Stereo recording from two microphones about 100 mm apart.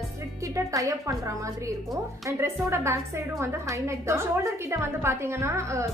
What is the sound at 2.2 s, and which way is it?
A woman's voice, 30° right (ahead or behind).